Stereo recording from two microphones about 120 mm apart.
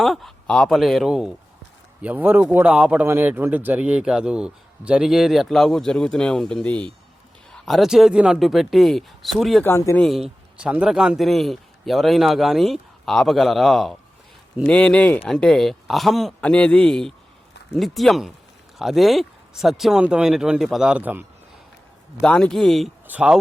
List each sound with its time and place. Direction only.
0.0 s speech: centre (ahead or behind)
3.1 s speech: 20° right (ahead or behind); by 9.6 s centre (ahead or behind)
9.6 s speech: 20° left (ahead or behind)
10.0 s a man's voice: centre (ahead or behind)
22.2 s speech: 5° left (ahead or behind)
23.0 s speech: 10° right (ahead or behind)